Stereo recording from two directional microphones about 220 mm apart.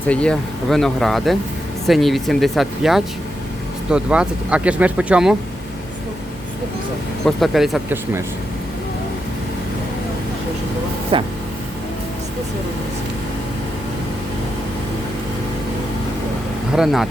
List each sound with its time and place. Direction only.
0.1 s speech: 5° left (ahead or behind)
7.3 s speech: centre (ahead or behind)
11.1 s speech: 20° right (ahead or behind)
16.7 s speech: centre (ahead or behind)